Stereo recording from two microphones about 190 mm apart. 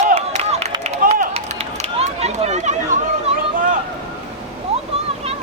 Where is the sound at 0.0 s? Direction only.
40° right (ahead or behind).